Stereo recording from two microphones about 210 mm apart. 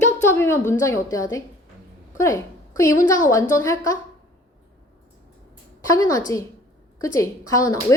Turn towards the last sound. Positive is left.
turn(degrees=15)  # may be behind; listen again after turning